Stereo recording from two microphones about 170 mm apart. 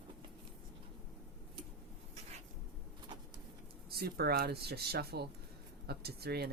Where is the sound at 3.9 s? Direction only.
65° right (ahead or behind).